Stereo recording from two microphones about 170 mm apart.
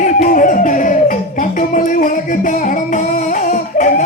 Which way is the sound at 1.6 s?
55° left (ahead or behind).